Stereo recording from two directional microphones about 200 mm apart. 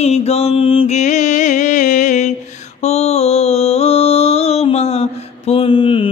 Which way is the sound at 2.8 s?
30° left (ahead or behind).